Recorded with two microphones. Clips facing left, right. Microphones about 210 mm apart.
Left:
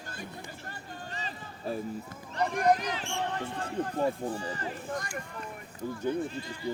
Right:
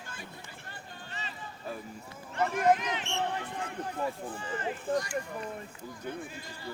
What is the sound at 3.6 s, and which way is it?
Speech, 35° left (ahead or behind).